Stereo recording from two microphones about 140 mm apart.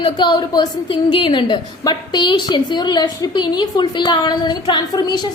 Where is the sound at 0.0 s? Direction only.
30° left (ahead or behind).